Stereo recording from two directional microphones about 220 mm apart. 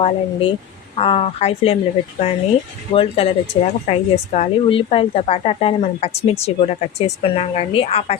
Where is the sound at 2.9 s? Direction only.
25° left (ahead or behind).